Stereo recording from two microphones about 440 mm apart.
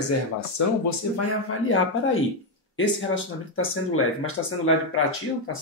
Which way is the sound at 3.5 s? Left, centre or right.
Left.